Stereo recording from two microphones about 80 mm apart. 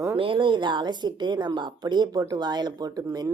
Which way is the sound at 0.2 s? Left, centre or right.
Right.